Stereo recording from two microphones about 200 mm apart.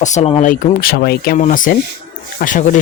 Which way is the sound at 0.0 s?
35° left (ahead or behind).